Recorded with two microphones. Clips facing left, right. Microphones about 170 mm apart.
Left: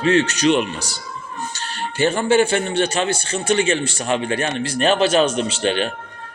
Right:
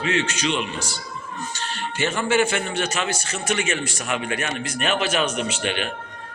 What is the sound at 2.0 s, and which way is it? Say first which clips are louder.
A man's voice: left 5 dB; 30° left (ahead or behind).